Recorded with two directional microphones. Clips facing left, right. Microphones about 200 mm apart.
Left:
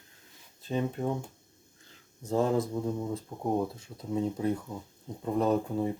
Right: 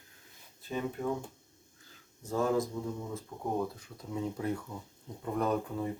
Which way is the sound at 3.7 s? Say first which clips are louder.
Left 6 dB; 25° left (ahead or behind).